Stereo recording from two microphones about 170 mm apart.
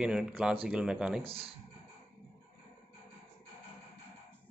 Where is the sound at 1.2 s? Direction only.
35° right (ahead or behind).